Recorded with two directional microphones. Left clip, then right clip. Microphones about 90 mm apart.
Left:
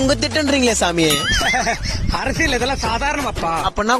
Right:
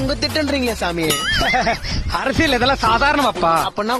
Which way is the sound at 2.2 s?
80° right.